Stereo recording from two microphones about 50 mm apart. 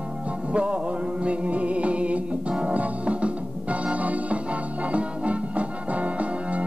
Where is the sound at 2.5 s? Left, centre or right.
Right.